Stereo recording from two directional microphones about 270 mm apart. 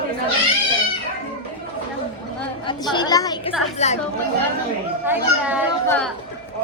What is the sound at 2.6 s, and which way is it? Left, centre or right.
Speech, centre.